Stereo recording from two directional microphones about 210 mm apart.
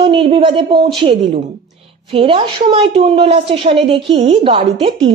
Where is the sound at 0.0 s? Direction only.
25° right (ahead or behind).